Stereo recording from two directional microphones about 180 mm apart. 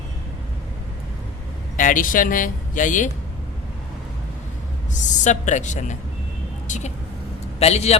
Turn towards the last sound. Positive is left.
turn(degrees=35)  # may be behind; listen again after turning